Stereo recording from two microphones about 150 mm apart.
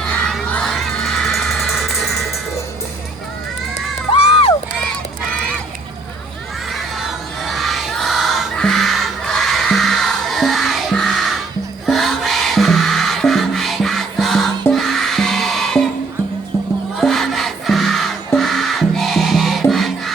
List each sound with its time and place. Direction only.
0.0 s music: 5° left (ahead or behind)
4.1 s crowd: 40° left (ahead or behind)
6.7 s crowd: centre (ahead or behind)
11.9 s music: centre (ahead or behind)
17.0 s crowd: centre (ahead or behind)
18.3 s music: centre (ahead or behind)